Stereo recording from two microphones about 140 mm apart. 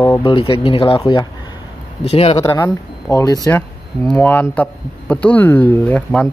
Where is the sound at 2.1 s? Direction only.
45° left (ahead or behind).